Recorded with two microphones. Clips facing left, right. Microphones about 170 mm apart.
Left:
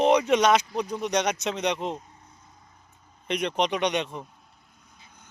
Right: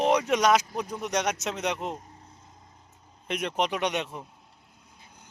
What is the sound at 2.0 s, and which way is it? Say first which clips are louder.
Vehicle: right 2 dB; 30° right (ahead or behind).